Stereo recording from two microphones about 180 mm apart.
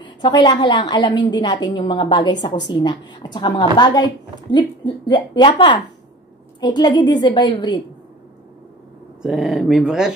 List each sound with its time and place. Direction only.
0.0 s a woman's voice: 25° left (ahead or behind)
9.2 s speech: centre (ahead or behind)